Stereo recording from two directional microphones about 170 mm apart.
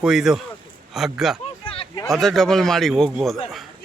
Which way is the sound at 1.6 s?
30° left (ahead or behind).